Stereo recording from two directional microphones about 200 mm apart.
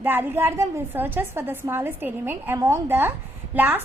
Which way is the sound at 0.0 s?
10° right (ahead or behind).